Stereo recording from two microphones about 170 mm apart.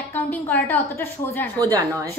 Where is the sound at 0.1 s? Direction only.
10° left (ahead or behind).